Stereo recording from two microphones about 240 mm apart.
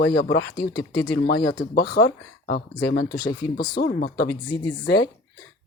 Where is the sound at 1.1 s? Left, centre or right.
Left.